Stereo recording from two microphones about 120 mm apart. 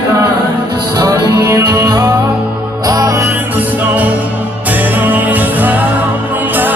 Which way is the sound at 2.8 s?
30° right (ahead or behind).